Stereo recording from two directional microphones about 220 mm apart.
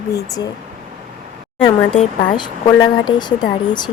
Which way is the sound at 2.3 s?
20° left (ahead or behind).